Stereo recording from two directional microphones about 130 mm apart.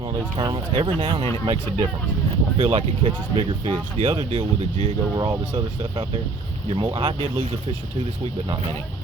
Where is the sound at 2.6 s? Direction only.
50° right (ahead or behind).